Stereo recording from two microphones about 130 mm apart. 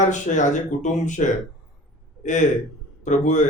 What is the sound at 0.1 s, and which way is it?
Speech, 70° left (ahead or behind).